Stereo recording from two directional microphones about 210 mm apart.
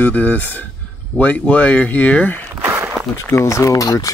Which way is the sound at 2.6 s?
10° right (ahead or behind).